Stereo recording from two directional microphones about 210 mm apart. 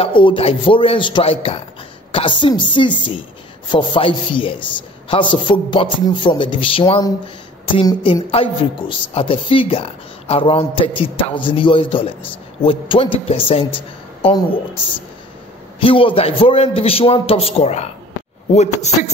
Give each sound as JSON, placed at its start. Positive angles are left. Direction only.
{"t": 0.0, "sound": "a woman's voice", "side_deg": 25}
{"t": 15.8, "sound": "a woman's voice", "side_deg": 25}